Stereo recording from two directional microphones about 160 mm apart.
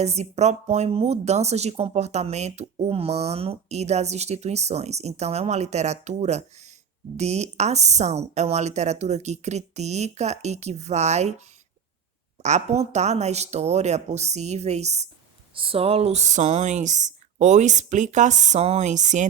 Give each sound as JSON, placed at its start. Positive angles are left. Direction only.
{"t": 0.0, "sound": "speech", "side_deg": -45}
{"t": 15.5, "sound": "speech", "side_deg": -35}